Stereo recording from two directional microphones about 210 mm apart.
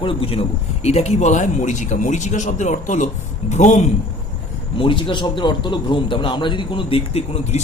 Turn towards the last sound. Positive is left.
turn(degrees=30)  # may be behind; listen again after turning